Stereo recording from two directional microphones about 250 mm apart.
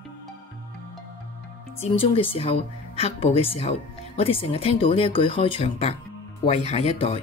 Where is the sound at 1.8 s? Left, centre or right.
Left.